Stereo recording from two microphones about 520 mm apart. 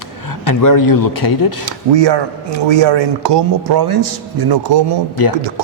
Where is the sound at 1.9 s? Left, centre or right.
Right.